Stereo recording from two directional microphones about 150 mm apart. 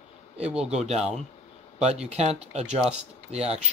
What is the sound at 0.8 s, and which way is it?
A man's voice, 45° right (ahead or behind).